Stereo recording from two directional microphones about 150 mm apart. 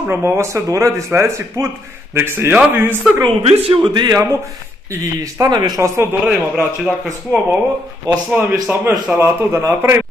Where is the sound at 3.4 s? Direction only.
40° right (ahead or behind).